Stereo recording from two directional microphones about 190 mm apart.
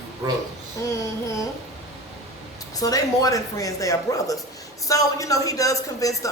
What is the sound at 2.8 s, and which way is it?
A woman's voice, 20° left (ahead or behind).